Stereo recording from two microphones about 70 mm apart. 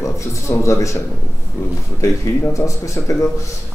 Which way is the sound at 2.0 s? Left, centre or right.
Left.